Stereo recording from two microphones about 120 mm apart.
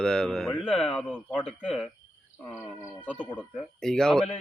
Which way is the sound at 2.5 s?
25° left (ahead or behind).